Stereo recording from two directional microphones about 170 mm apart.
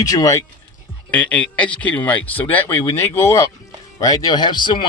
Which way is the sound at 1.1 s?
10° left (ahead or behind).